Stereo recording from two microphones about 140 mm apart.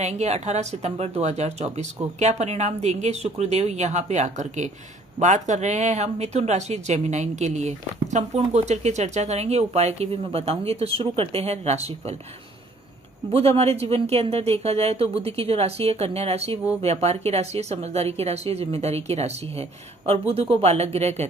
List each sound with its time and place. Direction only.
0.0 s speech: 55° right (ahead or behind)
13.3 s speech: 45° right (ahead or behind)